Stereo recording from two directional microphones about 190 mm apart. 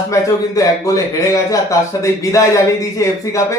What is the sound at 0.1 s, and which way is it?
A man's voice, 15° left (ahead or behind).